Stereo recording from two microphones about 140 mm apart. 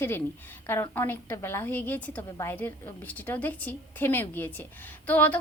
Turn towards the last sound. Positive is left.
turn(degrees=15)  # may be behind; listen again after turning